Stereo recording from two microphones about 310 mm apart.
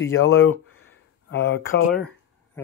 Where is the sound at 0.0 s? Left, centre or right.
Left.